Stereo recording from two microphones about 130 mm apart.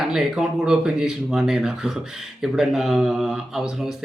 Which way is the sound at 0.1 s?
5° right (ahead or behind).